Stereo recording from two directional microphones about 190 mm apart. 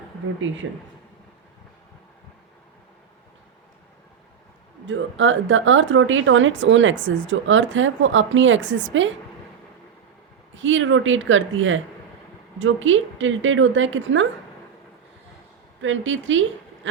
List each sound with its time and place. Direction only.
0.4 s speech: 90° right
4.9 s speech: 90° right
10.5 s a woman's voice: 90° right
15.8 s speech: 80° right
16.8 s quack: 75° right (ahead or behind)